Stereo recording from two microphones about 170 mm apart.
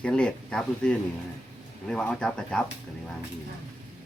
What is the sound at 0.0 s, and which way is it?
Speech, 5° left (ahead or behind).